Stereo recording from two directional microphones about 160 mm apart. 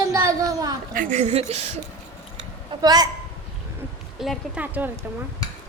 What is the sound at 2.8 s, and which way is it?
Speech, 25° right (ahead or behind).